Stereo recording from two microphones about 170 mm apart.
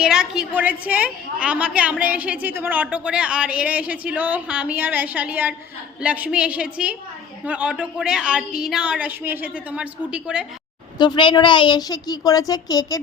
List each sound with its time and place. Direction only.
0.0 s a woman's voice: 5° right (ahead or behind)
10.9 s a woman's voice: 25° left (ahead or behind)